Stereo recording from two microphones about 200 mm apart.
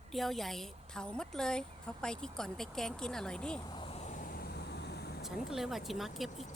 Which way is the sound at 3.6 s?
20° left (ahead or behind).